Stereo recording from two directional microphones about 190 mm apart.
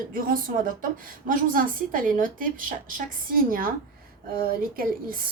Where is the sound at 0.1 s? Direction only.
50° right (ahead or behind).